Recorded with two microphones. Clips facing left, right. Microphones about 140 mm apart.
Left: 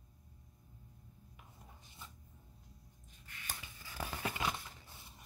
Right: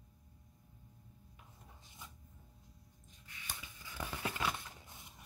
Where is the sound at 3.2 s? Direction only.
40° left (ahead or behind).